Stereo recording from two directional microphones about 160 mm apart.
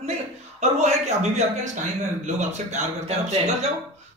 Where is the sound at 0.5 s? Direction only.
45° right (ahead or behind).